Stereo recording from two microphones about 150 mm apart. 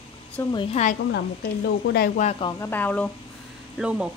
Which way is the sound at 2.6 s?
10° left (ahead or behind).